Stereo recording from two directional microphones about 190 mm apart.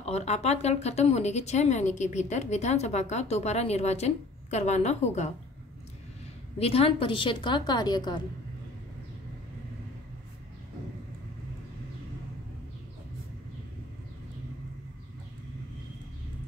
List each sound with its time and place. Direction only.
0.0 s speech: 35° left (ahead or behind)
6.6 s a woman's voice: 30° left (ahead or behind)